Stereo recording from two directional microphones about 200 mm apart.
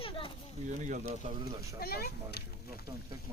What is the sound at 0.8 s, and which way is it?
Speech, 35° right (ahead or behind).